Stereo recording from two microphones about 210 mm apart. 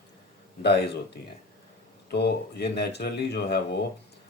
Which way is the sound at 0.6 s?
50° left (ahead or behind).